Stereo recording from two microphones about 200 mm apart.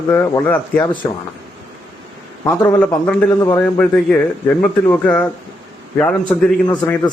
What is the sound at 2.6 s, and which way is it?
A man's voice, 10° left (ahead or behind).